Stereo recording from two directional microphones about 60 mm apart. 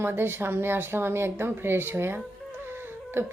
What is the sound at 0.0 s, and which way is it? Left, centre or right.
A woman's voice, right.